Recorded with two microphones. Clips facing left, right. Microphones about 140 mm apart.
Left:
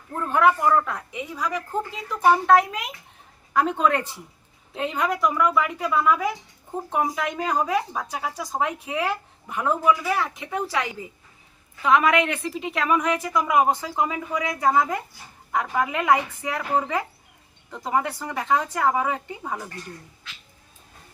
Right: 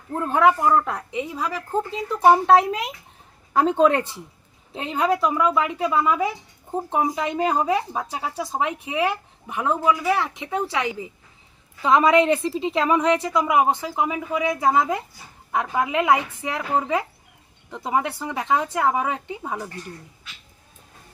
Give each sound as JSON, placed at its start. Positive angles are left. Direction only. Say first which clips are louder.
{"t": 0.2, "sound": "a woman's voice", "louder": "right 2 dB", "side_deg": -25}
{"t": 11.8, "sound": "a woman's voice", "louder": "right 3 dB", "side_deg": -30}